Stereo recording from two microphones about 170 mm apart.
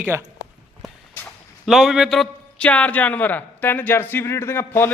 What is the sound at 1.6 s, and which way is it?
A man's voice, centre (ahead or behind).